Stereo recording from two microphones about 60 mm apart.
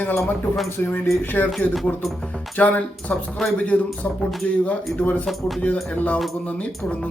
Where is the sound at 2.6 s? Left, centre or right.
Left.